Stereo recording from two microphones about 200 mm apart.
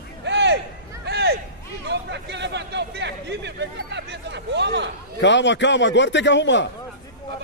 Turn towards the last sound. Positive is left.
turn(degrees=60)  # may be behind; listen again after turning